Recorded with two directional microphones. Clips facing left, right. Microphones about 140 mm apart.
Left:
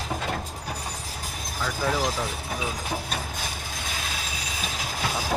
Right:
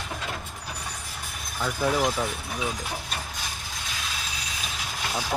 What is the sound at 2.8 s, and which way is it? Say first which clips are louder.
Vehicle: left 3 dB; 45° left (ahead or behind).